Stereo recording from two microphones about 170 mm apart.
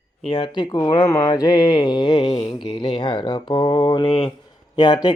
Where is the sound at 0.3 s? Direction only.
30° left (ahead or behind).